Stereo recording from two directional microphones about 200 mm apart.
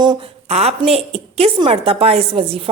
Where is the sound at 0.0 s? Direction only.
25° right (ahead or behind).